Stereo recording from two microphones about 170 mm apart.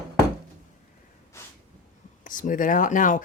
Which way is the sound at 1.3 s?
15° left (ahead or behind).